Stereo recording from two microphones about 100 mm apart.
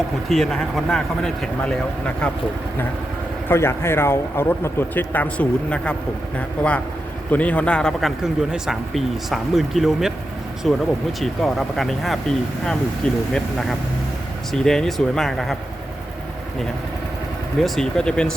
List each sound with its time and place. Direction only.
0.3 s speech: centre (ahead or behind)
3.5 s a man's voice: 25° left (ahead or behind); by 8.1 s 5° left (ahead or behind)
8.2 s speech: 5° right (ahead or behind)
17.6 s a man's voice: 5° left (ahead or behind)